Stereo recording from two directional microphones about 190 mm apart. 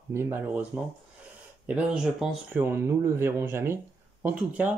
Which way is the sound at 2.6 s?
15° right (ahead or behind).